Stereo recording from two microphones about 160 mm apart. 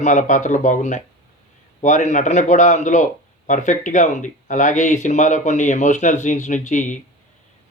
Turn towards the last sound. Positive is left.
turn(degrees=50)  # may be behind; listen again after turning